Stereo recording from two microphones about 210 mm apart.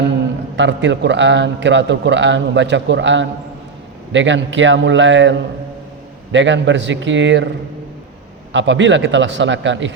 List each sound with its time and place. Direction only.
0.5 s a man's voice: 60° right (ahead or behind)
8.5 s a man's voice: 60° right (ahead or behind)